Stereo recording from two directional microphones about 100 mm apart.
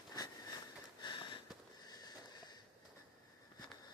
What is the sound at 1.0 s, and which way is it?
Sniff, 50° left (ahead or behind).